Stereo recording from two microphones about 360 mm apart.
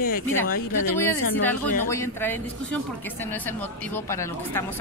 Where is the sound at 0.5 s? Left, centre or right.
Left.